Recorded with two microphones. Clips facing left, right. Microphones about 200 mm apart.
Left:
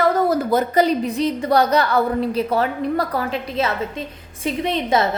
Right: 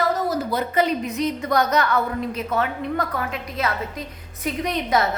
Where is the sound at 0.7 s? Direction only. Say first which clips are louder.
Left 4 dB; 35° left (ahead or behind).